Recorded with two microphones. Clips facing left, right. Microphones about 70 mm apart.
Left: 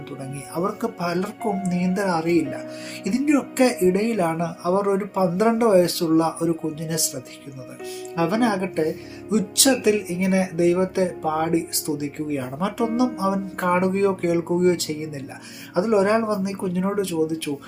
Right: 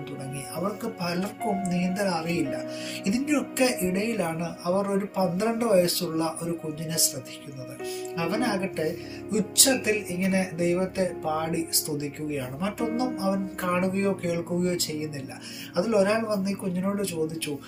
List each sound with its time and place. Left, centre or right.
0.8 s speech: left
1.4 s speech: centre
1.7 s speech: left
2.4 s speech: centre
3.0 s speech: left
7.9 s speech: left
9.3 s music: left
9.8 s speech: left
15.7 s speech: left